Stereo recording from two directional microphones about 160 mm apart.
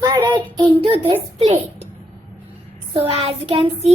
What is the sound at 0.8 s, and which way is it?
Child singing, 35° right (ahead or behind).